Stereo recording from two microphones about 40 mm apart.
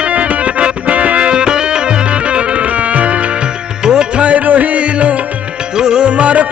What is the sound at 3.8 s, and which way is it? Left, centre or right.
Music, centre.